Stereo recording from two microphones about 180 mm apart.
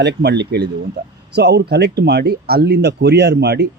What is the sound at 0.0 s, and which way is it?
Speech, 70° right (ahead or behind).